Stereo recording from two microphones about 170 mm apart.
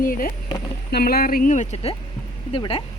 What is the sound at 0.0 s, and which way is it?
Speech, 55° left (ahead or behind).